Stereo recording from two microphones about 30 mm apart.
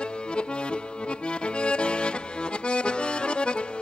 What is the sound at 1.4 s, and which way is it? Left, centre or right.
Accordion, left.